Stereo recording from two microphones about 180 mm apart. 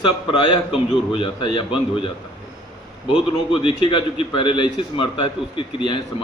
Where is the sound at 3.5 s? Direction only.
30° left (ahead or behind).